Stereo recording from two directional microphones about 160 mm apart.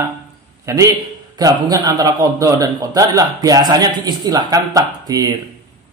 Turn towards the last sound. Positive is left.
turn(degrees=-25)  # may be behind; listen again after turning